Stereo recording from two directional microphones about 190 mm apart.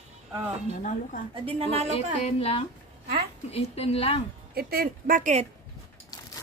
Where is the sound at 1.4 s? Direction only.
35° right (ahead or behind).